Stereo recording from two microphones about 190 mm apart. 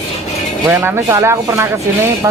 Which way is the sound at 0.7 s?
15° right (ahead or behind).